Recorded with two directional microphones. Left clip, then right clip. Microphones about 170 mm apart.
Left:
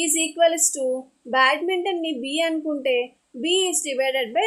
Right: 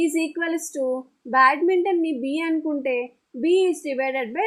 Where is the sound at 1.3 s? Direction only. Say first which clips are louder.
Right 2 dB; 40° right (ahead or behind).